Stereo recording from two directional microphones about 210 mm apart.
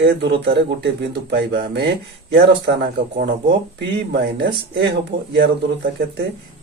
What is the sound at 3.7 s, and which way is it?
Speech, 55° right (ahead or behind).